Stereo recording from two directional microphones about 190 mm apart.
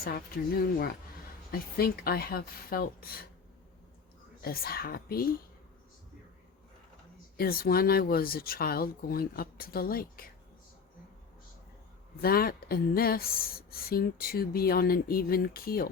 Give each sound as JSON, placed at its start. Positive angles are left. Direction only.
{"t": 0.0, "sound": "speech", "side_deg": 50}
{"t": 4.4, "sound": "speech", "side_deg": 50}
{"t": 7.3, "sound": "speech", "side_deg": 50}
{"t": 12.2, "sound": "speech", "side_deg": 50}